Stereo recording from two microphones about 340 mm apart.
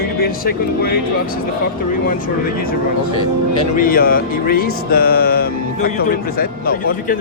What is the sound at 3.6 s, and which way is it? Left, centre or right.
Speech, left.